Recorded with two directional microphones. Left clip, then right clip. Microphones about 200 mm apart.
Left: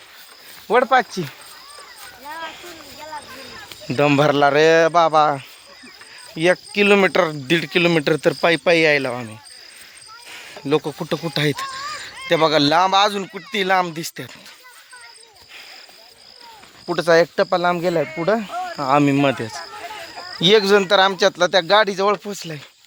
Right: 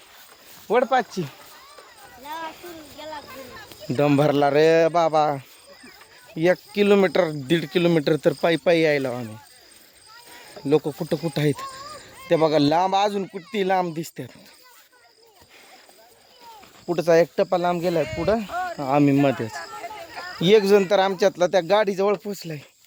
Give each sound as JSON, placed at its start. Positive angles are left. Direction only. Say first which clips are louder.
{"t": 0.7, "sound": "speech", "louder": "left 4 dB", "side_deg": 20}
{"t": 3.8, "sound": "speech", "louder": "left 4 dB", "side_deg": 0}
{"t": 10.2, "sound": "cricket", "louder": "left 1 dB", "side_deg": -15}
{"t": 10.8, "sound": "speech", "louder": "left 2 dB", "side_deg": 0}
{"t": 11.3, "sound": "a sound", "louder": "left 4 dB", "side_deg": -15}
{"t": 12.5, "sound": "speech", "louder": "left 6 dB", "side_deg": -15}
{"t": 16.9, "sound": "speech", "louder": "left 3 dB", "side_deg": -5}
{"t": 17.5, "sound": "speech", "louder": "left 4 dB", "side_deg": 15}
{"t": 17.8, "sound": "speech", "louder": "left 3 dB", "side_deg": 35}
{"t": 18.3, "sound": "a sound", "louder": "left 2 dB", "side_deg": 10}
{"t": 18.8, "sound": "speech", "louder": "left 3 dB", "side_deg": 5}
{"t": 19.7, "sound": "a sound", "louder": "left 2 dB", "side_deg": 40}
{"t": 20.4, "sound": "speech", "louder": "left 2 dB", "side_deg": -10}